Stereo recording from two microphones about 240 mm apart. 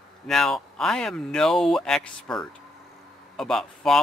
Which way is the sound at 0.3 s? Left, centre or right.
Centre.